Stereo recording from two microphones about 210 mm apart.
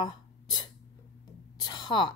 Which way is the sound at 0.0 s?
20° left (ahead or behind).